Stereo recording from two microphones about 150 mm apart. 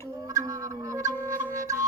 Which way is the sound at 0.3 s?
25° right (ahead or behind).